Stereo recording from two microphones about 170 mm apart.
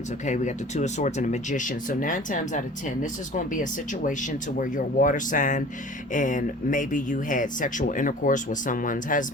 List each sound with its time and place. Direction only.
0.3 s speech: 45° left (ahead or behind)